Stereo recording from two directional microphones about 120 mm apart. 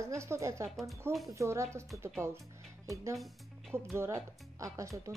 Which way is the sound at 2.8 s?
25° right (ahead or behind).